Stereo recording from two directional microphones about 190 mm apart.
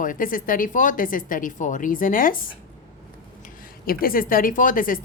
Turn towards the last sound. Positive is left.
turn(degrees=45)  # may be behind; listen again after turning